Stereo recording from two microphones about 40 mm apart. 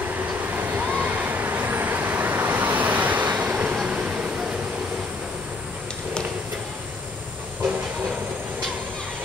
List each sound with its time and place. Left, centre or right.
0.0 s vehicle: right
3.8 s vehicle: right